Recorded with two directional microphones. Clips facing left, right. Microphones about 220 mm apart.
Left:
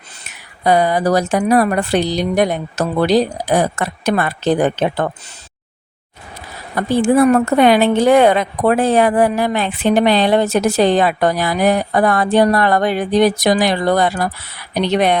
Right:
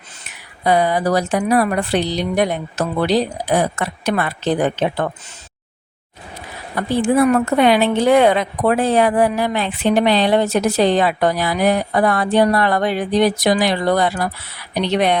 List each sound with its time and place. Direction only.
0.6 s speech: 45° left (ahead or behind)
6.7 s speech: 45° left (ahead or behind)